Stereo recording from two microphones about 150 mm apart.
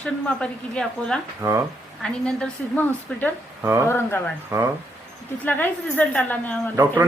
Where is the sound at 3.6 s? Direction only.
15° right (ahead or behind).